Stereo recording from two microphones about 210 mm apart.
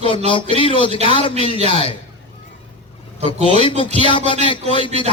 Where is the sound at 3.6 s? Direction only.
25° left (ahead or behind).